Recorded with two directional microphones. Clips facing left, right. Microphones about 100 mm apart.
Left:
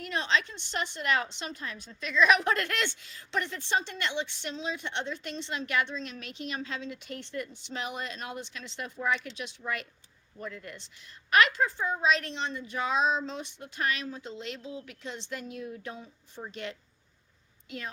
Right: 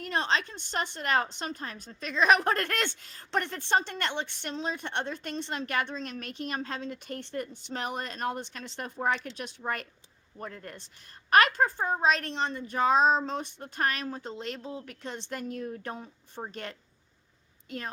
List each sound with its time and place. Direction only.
0.0 s a woman's voice: 45° right (ahead or behind)